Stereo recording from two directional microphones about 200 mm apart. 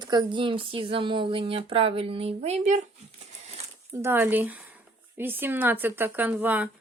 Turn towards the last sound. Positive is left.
turn(degrees=-10)  # may be behind; listen again after turning